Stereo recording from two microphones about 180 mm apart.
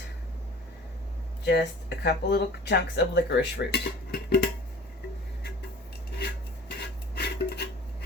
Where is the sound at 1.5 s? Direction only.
70° left (ahead or behind).